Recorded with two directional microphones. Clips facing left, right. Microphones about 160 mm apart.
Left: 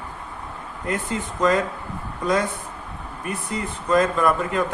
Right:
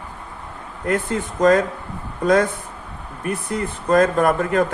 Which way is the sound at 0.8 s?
50° right (ahead or behind).